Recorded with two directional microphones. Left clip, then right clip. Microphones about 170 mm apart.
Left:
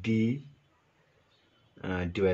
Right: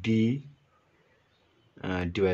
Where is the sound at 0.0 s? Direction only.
20° right (ahead or behind).